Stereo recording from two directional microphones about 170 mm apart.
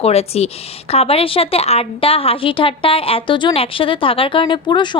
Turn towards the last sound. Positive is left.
turn(degrees=25)  # may be behind; listen again after turning